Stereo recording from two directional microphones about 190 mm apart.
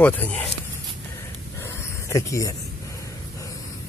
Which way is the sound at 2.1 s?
15° left (ahead or behind).